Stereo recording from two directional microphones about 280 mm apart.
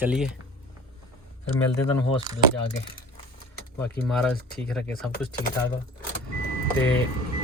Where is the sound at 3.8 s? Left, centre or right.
Centre.